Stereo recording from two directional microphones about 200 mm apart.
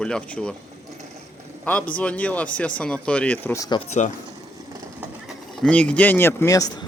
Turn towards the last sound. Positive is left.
turn(degrees=15)  # may be behind; listen again after turning